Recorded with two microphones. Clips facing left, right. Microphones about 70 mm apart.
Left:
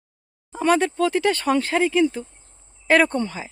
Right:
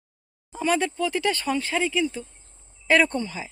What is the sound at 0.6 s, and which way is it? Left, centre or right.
Speech, left.